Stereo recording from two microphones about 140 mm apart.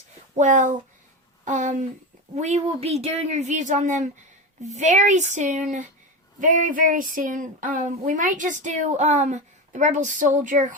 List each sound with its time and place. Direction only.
0.3 s a woman's voice: 65° right (ahead or behind)
6.4 s speech: 70° right (ahead or behind)